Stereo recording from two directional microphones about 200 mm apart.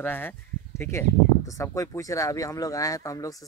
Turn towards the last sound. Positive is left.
turn(degrees=15)  # may be behind; listen again after turning